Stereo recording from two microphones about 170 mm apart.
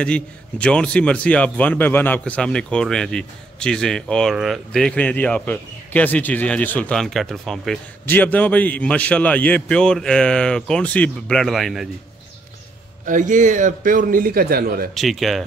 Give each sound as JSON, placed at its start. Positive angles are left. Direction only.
{"t": 0.0, "sound": "a man's voice", "side_deg": 5}
{"t": 13.0, "sound": "speech", "side_deg": -50}
{"t": 15.0, "sound": "speech", "side_deg": 0}